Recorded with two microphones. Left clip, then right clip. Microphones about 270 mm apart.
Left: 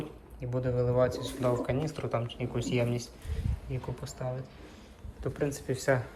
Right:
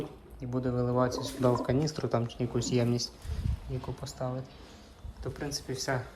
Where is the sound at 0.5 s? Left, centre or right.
Centre.